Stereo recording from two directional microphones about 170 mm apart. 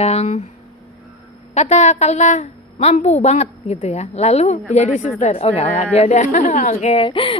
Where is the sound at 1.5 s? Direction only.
40° left (ahead or behind).